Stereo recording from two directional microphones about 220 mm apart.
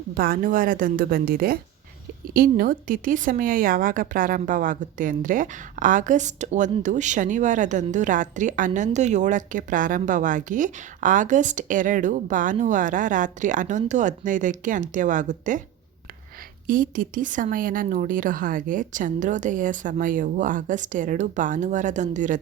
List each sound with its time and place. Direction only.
0.1 s speech: 40° right (ahead or behind)
16.6 s speech: 40° right (ahead or behind)